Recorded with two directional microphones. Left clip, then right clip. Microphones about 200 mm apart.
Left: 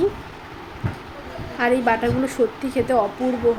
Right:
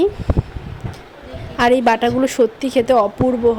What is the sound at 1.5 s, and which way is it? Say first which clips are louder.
A woman's voice: right 5 dB; 45° right (ahead or behind).